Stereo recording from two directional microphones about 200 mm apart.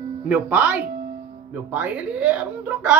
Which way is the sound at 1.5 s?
5° right (ahead or behind).